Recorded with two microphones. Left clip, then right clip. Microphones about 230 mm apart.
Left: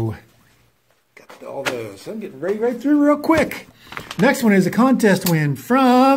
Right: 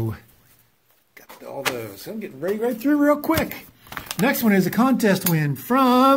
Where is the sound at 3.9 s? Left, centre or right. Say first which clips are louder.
Left 1 dB; right.